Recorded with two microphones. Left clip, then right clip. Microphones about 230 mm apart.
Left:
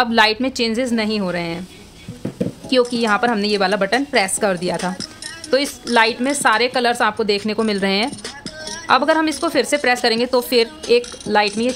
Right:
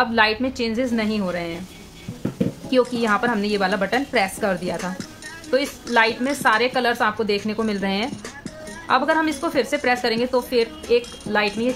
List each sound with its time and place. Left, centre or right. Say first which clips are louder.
0.0 s a woman's voice: left 3 dB; left
2.7 s a woman's voice: left 3 dB; left